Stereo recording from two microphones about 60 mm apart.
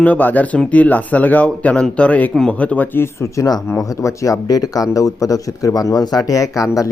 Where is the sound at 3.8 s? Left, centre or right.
Left.